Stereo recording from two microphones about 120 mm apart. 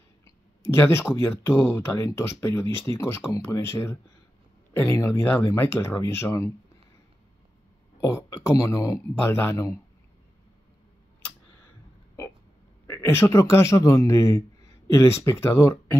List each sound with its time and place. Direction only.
0.2 s a man's voice: 20° left (ahead or behind)
8.0 s a man's voice: 20° left (ahead or behind)
12.8 s a man's voice: 20° left (ahead or behind)